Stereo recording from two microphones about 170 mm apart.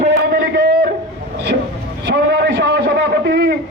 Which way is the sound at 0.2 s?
75° right (ahead or behind).